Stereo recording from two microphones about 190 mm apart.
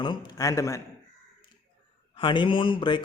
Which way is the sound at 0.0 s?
25° left (ahead or behind).